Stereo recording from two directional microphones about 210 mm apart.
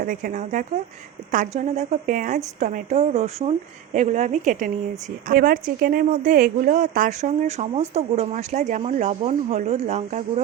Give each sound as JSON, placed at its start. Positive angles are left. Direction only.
{"t": 0.0, "sound": "a woman's voice", "side_deg": -40}